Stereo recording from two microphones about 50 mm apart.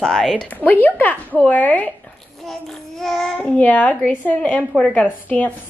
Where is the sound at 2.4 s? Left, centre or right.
Centre.